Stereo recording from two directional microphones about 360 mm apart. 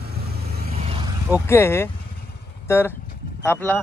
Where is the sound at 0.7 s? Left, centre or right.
Centre.